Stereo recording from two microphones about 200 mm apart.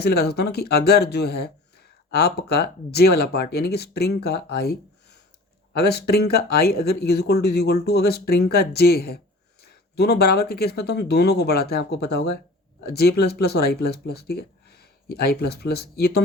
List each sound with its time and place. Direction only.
0.0 s speech: 55° left (ahead or behind)